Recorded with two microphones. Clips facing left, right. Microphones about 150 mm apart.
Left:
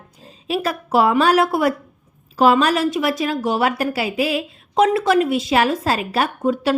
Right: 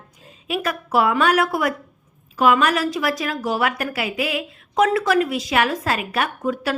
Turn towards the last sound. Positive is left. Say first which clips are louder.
# left 4 dB
turn(degrees=25)  # may be behind; listen again after turning